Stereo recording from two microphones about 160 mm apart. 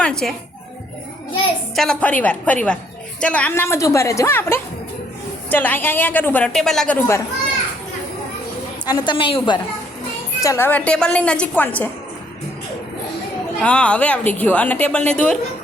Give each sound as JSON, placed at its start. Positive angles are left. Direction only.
{"t": 0.0, "sound": "speech", "side_deg": 5}
{"t": 1.7, "sound": "a woman's voice", "side_deg": 5}
{"t": 8.9, "sound": "a woman's voice", "side_deg": 30}
{"t": 10.4, "sound": "a woman's voice", "side_deg": 15}
{"t": 13.6, "sound": "a woman's voice", "side_deg": 10}